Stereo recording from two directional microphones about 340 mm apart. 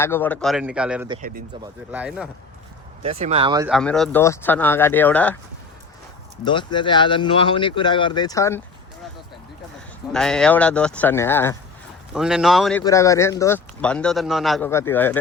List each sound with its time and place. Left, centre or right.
0.0 s speech: centre
3.0 s speech: centre
3.7 s speech: centre
6.4 s speech: centre
10.1 s speech: centre